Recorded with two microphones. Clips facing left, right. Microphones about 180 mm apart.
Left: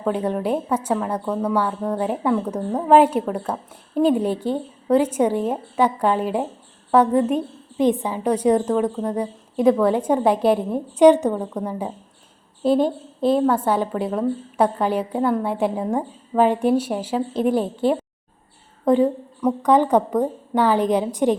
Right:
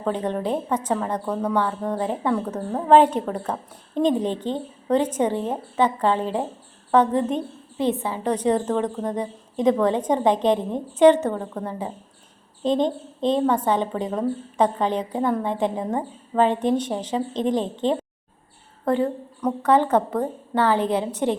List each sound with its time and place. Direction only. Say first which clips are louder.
0.0 s a woman's voice: left 2 dB; 10° left (ahead or behind)
2.6 s a woman's voice: left 3 dB; 5° right (ahead or behind)
2.9 s a woman's voice: left 1 dB; 10° left (ahead or behind)